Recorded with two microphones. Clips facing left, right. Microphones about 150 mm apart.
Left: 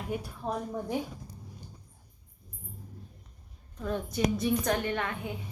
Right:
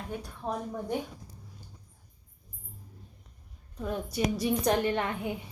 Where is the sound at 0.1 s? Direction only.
5° left (ahead or behind).